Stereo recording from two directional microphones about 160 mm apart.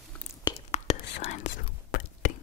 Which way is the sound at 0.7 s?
45° left (ahead or behind).